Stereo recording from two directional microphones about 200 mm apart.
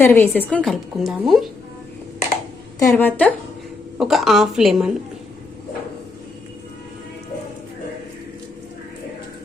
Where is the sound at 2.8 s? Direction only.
10° left (ahead or behind).